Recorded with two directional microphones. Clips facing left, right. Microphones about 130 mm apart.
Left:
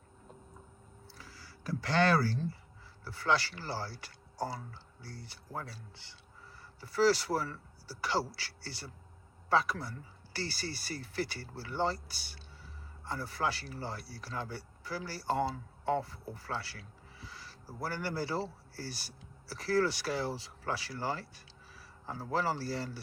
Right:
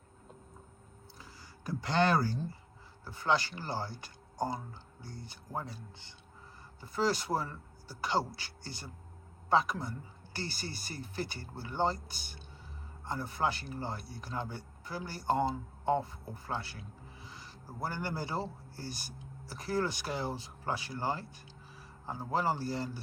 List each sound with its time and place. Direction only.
1.2 s speech: 20° right (ahead or behind)
6.8 s speech: 20° right (ahead or behind)